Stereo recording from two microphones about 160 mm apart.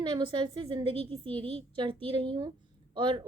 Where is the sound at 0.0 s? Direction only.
30° right (ahead or behind).